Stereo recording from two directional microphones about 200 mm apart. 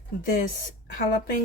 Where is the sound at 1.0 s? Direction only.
45° left (ahead or behind).